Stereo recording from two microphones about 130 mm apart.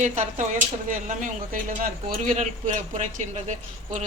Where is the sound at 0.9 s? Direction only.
85° right.